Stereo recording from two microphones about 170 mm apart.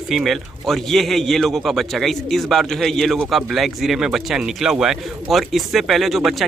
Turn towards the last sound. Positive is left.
turn(degrees=0)  # may be behind; listen again after turning